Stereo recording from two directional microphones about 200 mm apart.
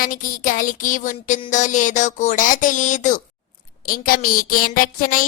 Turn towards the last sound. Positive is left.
turn(degrees=45)  # may be behind; listen again after turning